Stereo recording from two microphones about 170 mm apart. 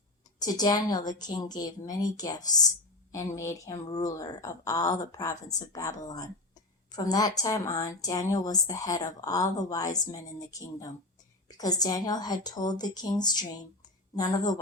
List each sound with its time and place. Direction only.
0.3 s a woman's voice: 25° left (ahead or behind)